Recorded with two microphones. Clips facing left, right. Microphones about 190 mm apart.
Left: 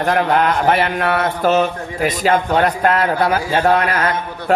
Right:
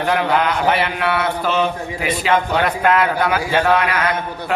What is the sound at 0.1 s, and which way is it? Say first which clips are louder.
Mantra: left 2 dB; 45° left (ahead or behind).